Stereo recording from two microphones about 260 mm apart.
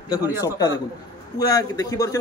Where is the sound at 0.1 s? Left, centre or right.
Centre.